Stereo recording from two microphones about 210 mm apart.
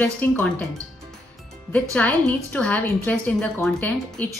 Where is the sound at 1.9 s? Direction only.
5° left (ahead or behind).